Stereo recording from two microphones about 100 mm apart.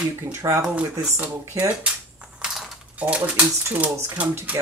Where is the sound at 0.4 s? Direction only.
35° right (ahead or behind).